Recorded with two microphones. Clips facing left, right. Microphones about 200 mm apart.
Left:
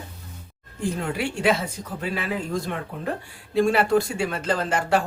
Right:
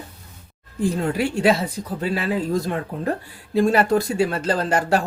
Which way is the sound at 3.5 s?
40° right (ahead or behind).